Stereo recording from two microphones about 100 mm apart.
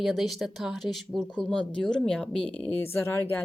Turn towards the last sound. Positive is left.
turn(degrees=20)  # may be behind; listen again after turning